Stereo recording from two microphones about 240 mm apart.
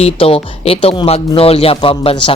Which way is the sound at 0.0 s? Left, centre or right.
Left.